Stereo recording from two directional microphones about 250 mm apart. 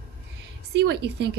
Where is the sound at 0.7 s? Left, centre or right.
Right.